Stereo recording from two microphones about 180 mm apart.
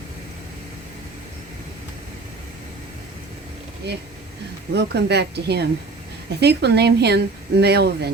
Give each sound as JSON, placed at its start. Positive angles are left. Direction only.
{"t": 4.7, "sound": "speech", "side_deg": -65}